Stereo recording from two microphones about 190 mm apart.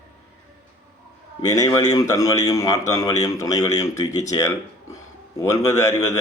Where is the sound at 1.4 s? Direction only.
15° left (ahead or behind).